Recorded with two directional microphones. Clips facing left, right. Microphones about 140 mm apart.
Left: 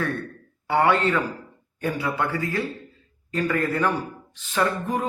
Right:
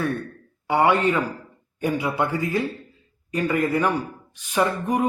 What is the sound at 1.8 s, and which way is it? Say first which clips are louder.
Speech: right 2 dB; 15° right (ahead or behind).